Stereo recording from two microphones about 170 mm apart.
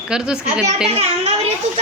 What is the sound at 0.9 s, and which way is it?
Speech, 40° right (ahead or behind).